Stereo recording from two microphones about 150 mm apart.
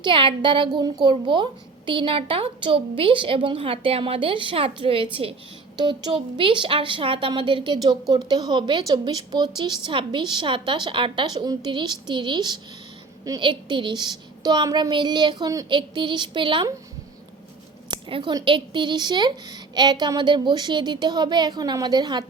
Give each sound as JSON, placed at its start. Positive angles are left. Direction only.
{"t": 0.0, "sound": "speech", "side_deg": -35}
{"t": 17.9, "sound": "a woman's voice", "side_deg": -30}